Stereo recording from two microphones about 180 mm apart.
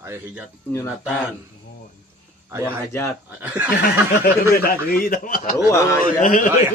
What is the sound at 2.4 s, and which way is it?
A man's voice, 15° right (ahead or behind).